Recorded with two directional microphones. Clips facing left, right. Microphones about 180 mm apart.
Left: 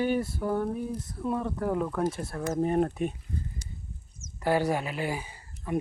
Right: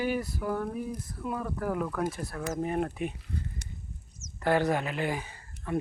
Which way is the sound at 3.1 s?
75° right (ahead or behind).